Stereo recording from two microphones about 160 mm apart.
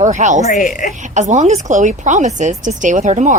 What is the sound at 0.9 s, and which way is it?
Speech, 50° right (ahead or behind).